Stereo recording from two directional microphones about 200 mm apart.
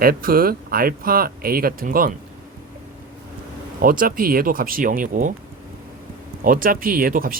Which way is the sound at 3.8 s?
45° right (ahead or behind).